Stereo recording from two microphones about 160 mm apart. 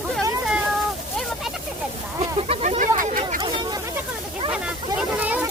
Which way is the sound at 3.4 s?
30° right (ahead or behind).